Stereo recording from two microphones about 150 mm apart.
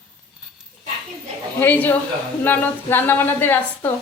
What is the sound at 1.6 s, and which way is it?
A woman's voice, 10° left (ahead or behind).